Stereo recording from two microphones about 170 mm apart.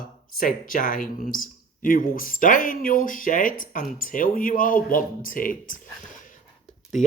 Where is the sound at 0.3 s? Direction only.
55° left (ahead or behind).